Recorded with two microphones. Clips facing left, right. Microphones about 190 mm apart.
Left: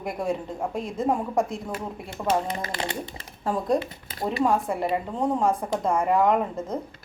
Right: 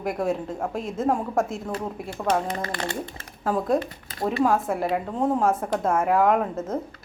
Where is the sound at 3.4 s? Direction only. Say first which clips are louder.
Right 1 dB; centre (ahead or behind).